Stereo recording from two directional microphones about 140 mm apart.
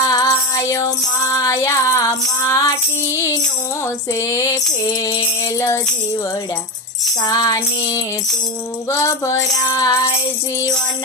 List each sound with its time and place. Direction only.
0.1 s music: 25° left (ahead or behind)
7.2 s music: 25° left (ahead or behind)